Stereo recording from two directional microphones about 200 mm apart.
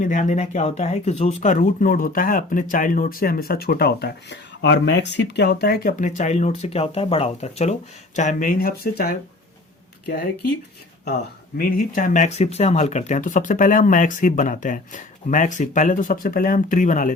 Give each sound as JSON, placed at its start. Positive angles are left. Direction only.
{"t": 0.0, "sound": "speech", "side_deg": 40}
{"t": 11.0, "sound": "speech", "side_deg": 50}